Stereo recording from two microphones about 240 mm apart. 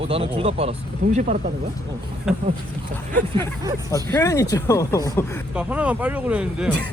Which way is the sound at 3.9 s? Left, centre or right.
Centre.